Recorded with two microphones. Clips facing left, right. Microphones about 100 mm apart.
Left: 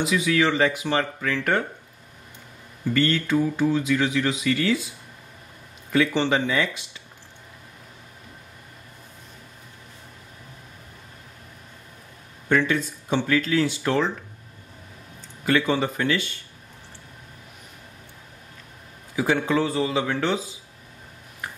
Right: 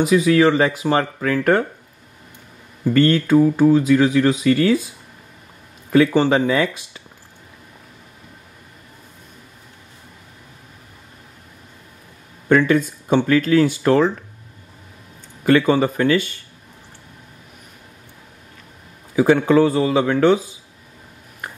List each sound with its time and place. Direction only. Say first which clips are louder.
0.0 s speech: right 8 dB; 40° right (ahead or behind)
2.9 s speech: right 7 dB; 45° right (ahead or behind)
5.9 s speech: right 7 dB; 45° right (ahead or behind)
12.4 s speech: right 7 dB; 50° right (ahead or behind)
15.4 s speech: right 7 dB; 50° right (ahead or behind)
19.1 s speech: right 8 dB; 50° right (ahead or behind)